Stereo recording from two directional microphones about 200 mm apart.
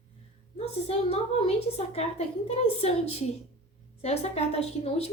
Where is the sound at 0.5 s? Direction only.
30° left (ahead or behind).